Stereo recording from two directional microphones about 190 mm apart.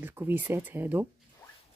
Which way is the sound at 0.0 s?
10° right (ahead or behind).